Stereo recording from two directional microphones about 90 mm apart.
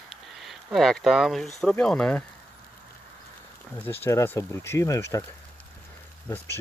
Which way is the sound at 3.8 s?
25° left (ahead or behind).